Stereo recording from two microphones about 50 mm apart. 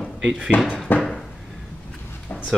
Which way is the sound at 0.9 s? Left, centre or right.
Left.